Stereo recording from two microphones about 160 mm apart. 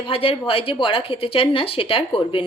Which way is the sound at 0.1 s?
35° left (ahead or behind).